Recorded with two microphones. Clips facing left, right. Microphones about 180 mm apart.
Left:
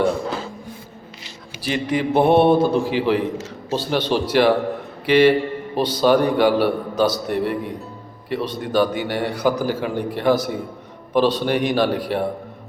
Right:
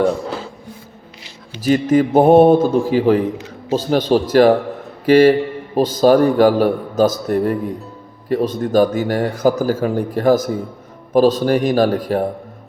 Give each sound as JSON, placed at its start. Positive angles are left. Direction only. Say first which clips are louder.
{"t": 1.6, "sound": "a man's voice", "louder": "right 7 dB", "side_deg": -45}